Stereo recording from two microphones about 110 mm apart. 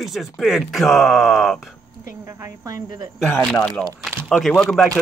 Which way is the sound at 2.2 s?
30° right (ahead or behind).